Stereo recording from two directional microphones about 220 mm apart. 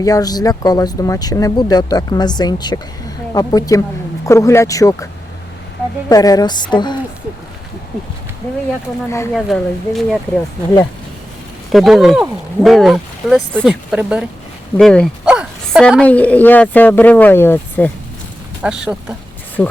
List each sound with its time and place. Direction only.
0.0 s a woman's voice: 15° left (ahead or behind)
6.1 s a woman's voice: 15° left (ahead or behind)
9.0 s a woman's voice: 10° left (ahead or behind)
9.3 s speech: centre (ahead or behind)
11.7 s a woman's voice: centre (ahead or behind)
18.6 s speech: 5° right (ahead or behind)